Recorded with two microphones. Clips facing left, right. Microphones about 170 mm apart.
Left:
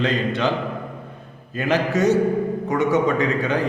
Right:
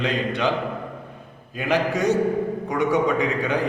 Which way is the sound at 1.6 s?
15° right (ahead or behind).